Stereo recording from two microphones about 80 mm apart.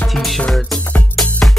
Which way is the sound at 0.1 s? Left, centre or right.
Centre.